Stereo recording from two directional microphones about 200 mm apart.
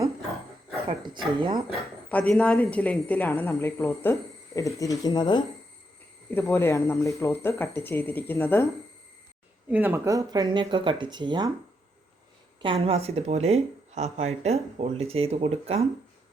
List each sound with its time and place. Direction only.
0.9 s speech: 20° right (ahead or behind)
1.7 s speech: 5° left (ahead or behind)
9.6 s speech: 10° right (ahead or behind)
12.6 s speech: 30° right (ahead or behind)